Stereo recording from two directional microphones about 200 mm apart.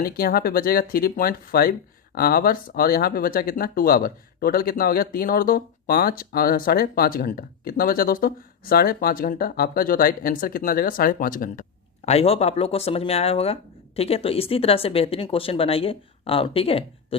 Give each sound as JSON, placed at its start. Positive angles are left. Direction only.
{"t": 0.0, "sound": "speech", "side_deg": 50}
{"t": 12.0, "sound": "speech", "side_deg": 30}